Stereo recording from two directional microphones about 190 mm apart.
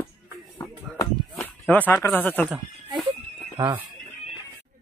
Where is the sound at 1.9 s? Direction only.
10° left (ahead or behind).